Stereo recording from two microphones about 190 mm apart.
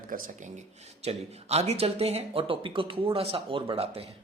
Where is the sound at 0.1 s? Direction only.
45° right (ahead or behind).